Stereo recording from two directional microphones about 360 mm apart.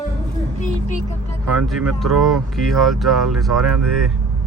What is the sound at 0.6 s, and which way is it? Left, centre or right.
Speech, left.